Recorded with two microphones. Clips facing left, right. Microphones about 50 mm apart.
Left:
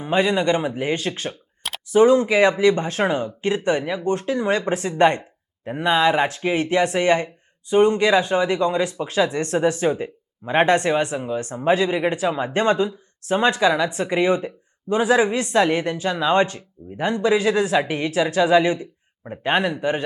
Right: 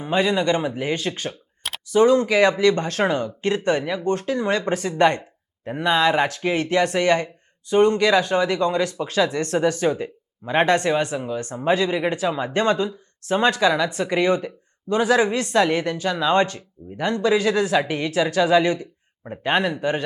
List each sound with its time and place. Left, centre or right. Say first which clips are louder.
0.1 s speech: left 1 dB; centre
1.9 s speech: left 1 dB; left